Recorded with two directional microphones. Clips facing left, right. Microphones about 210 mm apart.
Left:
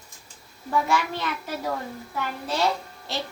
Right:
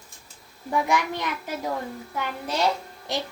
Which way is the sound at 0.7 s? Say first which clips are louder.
Even; 15° right (ahead or behind).